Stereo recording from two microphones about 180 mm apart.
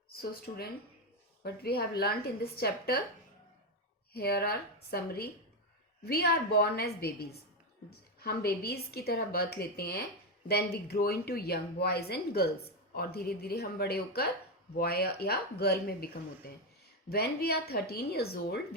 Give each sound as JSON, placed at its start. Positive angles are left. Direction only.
{"t": 0.2, "sound": "a woman's voice", "side_deg": 60}
{"t": 4.1, "sound": "a woman's voice", "side_deg": 60}
{"t": 17.1, "sound": "a woman's voice", "side_deg": 60}